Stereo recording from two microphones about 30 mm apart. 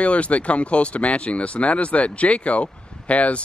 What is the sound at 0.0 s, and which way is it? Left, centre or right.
Speech, left.